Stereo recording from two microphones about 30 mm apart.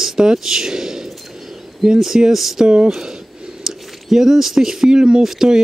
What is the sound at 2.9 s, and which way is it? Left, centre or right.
Speech, centre.